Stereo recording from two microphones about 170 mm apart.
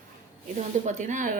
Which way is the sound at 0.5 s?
45° right (ahead or behind).